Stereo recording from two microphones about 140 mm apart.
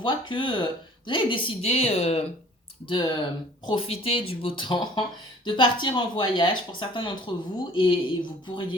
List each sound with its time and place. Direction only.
0.0 s speech: 35° left (ahead or behind)
2.8 s speech: 35° left (ahead or behind)